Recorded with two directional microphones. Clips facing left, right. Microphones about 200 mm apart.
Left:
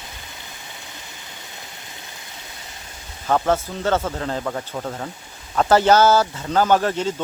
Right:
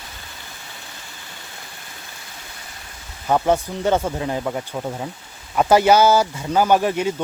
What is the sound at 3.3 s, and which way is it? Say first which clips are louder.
Speech: right 1 dB; 15° right (ahead or behind).